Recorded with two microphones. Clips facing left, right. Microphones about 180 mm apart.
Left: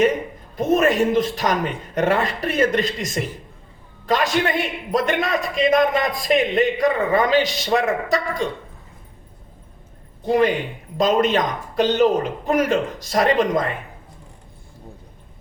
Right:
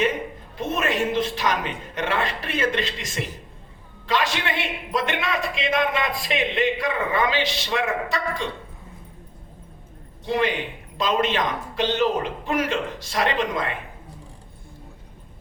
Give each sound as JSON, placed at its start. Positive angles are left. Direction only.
{"t": 0.5, "sound": "a man's voice", "side_deg": 40}
{"t": 10.2, "sound": "a man's voice", "side_deg": 40}